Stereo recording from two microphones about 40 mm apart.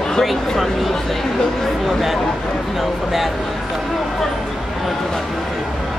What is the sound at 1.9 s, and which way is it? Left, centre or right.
Speech, centre.